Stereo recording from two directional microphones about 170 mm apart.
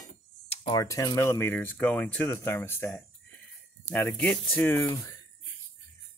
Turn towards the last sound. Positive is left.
turn(degrees=15)  # may be behind; listen again after turning